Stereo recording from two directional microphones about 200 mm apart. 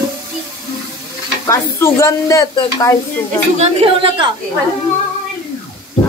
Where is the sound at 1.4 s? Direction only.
15° left (ahead or behind).